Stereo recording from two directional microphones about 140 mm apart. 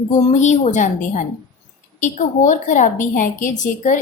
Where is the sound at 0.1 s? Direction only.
55° left (ahead or behind).